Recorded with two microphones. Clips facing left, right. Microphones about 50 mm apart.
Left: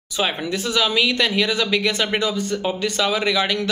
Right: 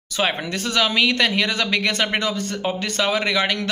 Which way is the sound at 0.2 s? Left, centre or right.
Right.